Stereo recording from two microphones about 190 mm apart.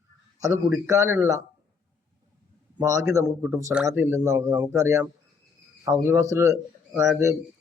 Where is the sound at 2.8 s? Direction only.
15° right (ahead or behind).